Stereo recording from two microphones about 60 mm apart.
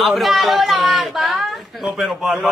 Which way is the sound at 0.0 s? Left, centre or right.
Centre.